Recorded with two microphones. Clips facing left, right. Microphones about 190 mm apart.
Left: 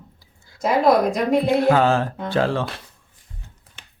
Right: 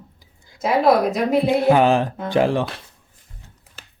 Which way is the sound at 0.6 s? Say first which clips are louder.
Even; 5° right (ahead or behind).